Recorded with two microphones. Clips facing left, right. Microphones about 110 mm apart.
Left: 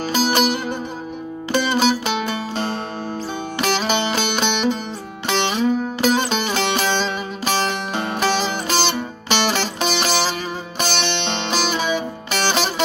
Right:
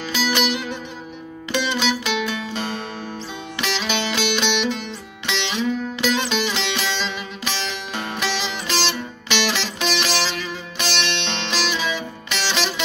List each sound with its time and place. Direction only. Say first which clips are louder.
0.0 s music: left 4 dB; 45° left (ahead or behind)